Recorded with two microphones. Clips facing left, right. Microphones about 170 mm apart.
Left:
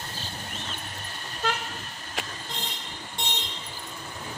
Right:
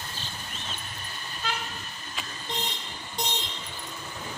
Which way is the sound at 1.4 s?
80° left.